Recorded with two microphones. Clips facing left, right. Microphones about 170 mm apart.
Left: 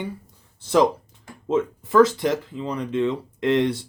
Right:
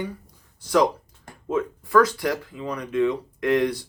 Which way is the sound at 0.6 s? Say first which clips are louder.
Left 2 dB; 25° left (ahead or behind).